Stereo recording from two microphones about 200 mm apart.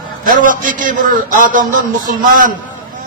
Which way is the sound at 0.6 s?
40° right (ahead or behind).